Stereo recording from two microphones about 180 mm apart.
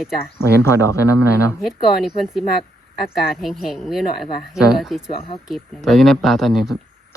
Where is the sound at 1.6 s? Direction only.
Centre (ahead or behind).